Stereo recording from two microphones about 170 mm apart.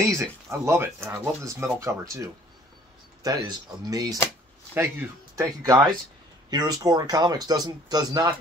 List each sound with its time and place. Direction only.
0.0 s speech: 20° right (ahead or behind)